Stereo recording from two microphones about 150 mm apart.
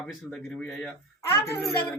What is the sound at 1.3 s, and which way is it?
Speech, 20° left (ahead or behind).